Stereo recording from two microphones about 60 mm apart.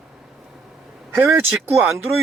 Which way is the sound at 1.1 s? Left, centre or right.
Right.